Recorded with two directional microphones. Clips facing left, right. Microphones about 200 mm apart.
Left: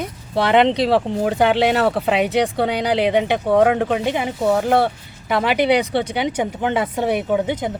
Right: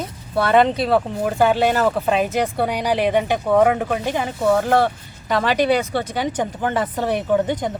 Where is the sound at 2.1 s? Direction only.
75° left (ahead or behind).